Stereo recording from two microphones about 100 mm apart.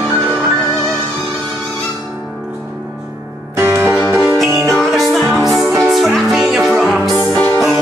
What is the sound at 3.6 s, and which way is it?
Music, 20° right (ahead or behind).